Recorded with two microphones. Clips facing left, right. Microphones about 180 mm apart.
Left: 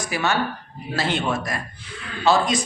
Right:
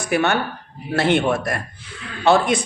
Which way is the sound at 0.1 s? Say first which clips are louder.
Right 5 dB; 60° right (ahead or behind).